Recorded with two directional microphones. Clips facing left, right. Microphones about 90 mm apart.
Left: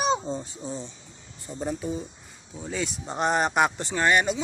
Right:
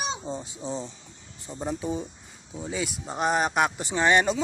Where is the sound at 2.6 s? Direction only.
5° right (ahead or behind).